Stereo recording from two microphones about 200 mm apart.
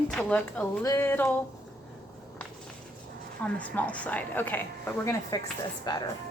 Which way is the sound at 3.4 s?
5° left (ahead or behind).